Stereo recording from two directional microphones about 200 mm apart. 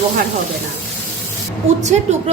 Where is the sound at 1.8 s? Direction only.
35° right (ahead or behind).